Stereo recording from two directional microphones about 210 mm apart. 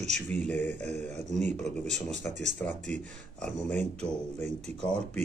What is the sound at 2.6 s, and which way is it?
Speech, 5° left (ahead or behind).